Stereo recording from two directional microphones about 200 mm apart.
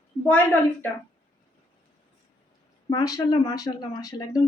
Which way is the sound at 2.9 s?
20° left (ahead or behind).